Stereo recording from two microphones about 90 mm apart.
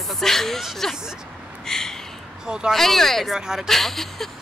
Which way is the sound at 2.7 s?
5° left (ahead or behind).